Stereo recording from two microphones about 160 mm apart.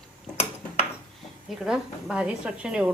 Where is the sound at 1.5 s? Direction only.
Centre (ahead or behind).